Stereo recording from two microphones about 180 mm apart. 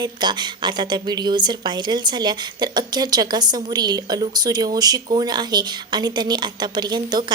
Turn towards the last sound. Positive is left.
turn(degrees=-25)  # may be behind; listen again after turning